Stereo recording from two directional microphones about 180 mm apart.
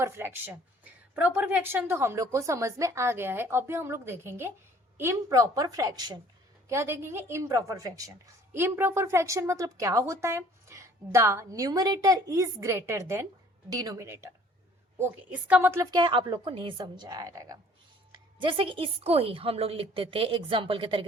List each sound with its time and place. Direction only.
0.0 s a woman's voice: 15° right (ahead or behind); by 21.0 s 30° right (ahead or behind)